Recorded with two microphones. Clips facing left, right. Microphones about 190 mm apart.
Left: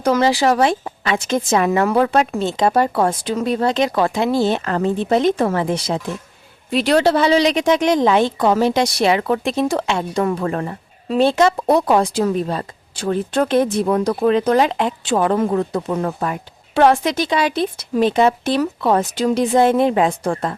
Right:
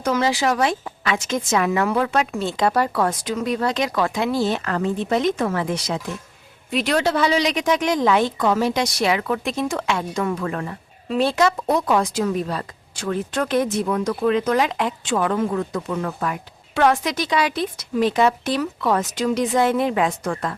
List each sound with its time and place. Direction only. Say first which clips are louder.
0.0 s a woman's voice: left 5 dB; 35° left (ahead or behind)
2.4 s a woman's voice: left 4 dB; 20° left (ahead or behind)